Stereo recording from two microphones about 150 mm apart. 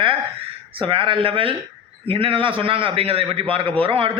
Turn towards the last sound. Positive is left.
turn(degrees=-35)  # may be behind; listen again after turning